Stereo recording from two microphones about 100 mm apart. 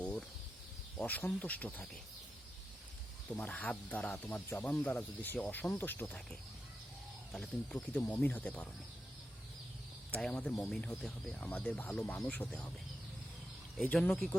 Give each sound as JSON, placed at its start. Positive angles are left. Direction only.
{"t": 0.0, "sound": "a sound", "side_deg": 15}
{"t": 1.0, "sound": "speech", "side_deg": 15}
{"t": 3.2, "sound": "speech", "side_deg": 15}
{"t": 4.2, "sound": "speech", "side_deg": 20}
{"t": 7.3, "sound": "speech", "side_deg": 5}
{"t": 10.1, "sound": "speech", "side_deg": 10}
{"t": 11.3, "sound": "speech", "side_deg": 15}
{"t": 13.8, "sound": "speech", "side_deg": 15}